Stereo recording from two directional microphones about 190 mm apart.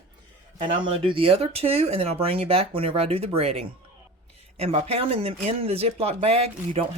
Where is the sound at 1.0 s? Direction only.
30° right (ahead or behind).